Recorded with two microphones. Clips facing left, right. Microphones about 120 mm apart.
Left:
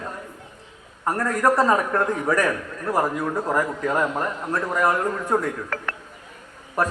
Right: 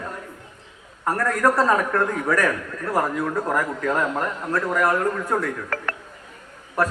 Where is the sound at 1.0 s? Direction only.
20° left (ahead or behind).